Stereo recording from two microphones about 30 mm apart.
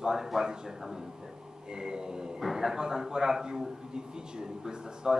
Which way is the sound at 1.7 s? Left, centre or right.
Right.